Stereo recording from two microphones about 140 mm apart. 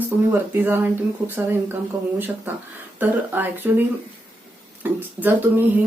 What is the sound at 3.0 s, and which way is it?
Speech, 15° right (ahead or behind).